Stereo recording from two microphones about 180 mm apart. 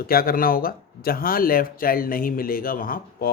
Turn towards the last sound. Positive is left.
turn(degrees=55)  # may be behind; listen again after turning